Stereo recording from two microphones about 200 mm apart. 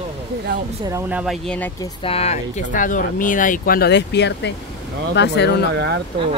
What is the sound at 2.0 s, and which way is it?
Speech, 30° left (ahead or behind).